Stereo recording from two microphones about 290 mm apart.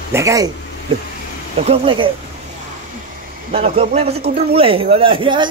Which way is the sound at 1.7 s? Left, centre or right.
Centre.